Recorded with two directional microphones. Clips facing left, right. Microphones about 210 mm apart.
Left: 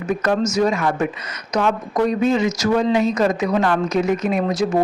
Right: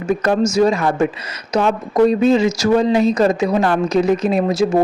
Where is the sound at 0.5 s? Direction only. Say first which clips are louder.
Right 4 dB; 30° right (ahead or behind).